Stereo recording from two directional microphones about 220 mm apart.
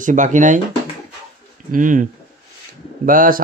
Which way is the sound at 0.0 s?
35° right (ahead or behind).